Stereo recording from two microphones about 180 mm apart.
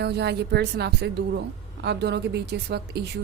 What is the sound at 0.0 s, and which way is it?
A woman's voice, 65° right (ahead or behind).